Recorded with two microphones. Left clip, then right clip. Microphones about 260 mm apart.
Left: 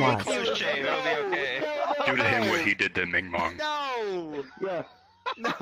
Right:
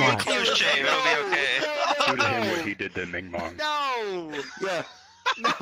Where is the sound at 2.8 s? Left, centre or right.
Left.